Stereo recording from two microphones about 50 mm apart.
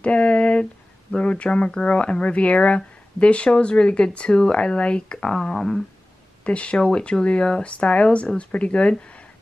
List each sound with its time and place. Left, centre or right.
0.0 s a sound: left
1.1 s speech: left
6.4 s speech: left